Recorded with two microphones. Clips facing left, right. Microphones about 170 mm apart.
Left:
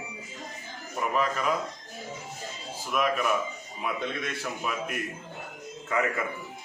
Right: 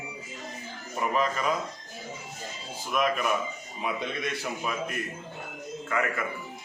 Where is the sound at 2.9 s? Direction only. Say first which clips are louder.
Even; centre (ahead or behind).